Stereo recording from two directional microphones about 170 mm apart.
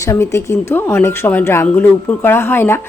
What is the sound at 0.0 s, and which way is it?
Speech, 15° left (ahead or behind).